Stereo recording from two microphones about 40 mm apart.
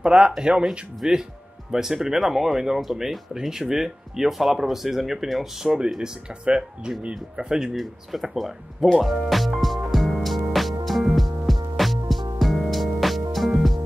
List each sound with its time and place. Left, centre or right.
0.0 s speech: right
0.7 s speech: centre
7.0 s speech: right
7.4 s speech: centre
7.7 s speech: centre
9.9 s music: centre